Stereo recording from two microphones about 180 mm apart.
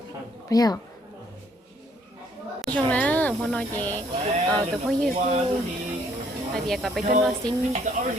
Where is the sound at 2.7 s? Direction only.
10° left (ahead or behind).